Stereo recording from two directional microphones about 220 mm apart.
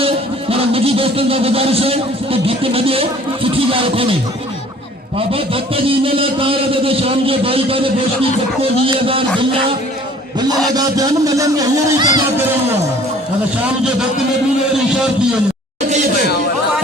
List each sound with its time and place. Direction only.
0.5 s speech: 25° right (ahead or behind)
5.1 s a man's voice: 25° right (ahead or behind)
10.8 s music: 15° right (ahead or behind)